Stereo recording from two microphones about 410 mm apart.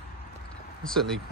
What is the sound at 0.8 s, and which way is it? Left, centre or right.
Speech, centre.